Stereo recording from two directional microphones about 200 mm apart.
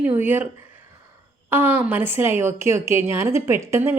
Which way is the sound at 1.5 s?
10° right (ahead or behind).